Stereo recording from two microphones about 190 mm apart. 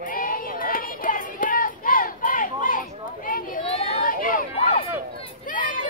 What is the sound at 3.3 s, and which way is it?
Children playing, 45° left (ahead or behind).